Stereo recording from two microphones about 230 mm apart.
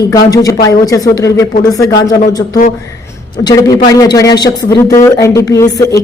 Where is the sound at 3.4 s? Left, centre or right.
Centre.